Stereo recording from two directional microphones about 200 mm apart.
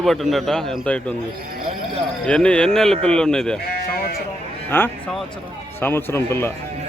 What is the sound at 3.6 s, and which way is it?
Sheep, 50° left (ahead or behind).